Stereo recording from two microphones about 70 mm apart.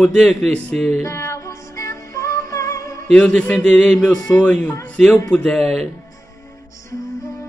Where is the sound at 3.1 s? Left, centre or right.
Centre.